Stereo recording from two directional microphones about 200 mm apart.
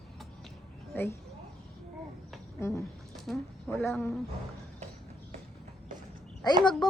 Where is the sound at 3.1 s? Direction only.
Centre (ahead or behind).